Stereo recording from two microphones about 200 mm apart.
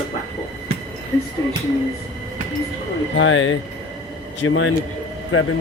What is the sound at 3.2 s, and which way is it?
Speech, 75° left (ahead or behind).